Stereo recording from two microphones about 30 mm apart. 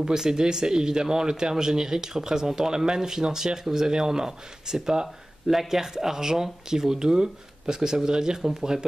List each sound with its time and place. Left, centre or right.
0.0 s speech: right
5.0 s speech: centre